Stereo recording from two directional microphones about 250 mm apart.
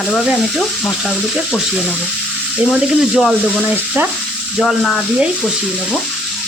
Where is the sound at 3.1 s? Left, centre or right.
Centre.